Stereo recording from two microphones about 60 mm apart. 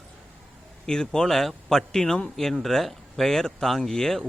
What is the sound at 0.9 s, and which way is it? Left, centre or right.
A man's voice, centre.